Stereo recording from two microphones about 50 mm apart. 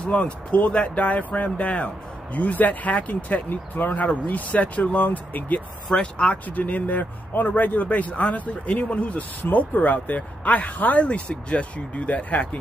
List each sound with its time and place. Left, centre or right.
0.0 s speech: left
5.9 s speech: centre
6.4 s speech: left
9.4 s speech: left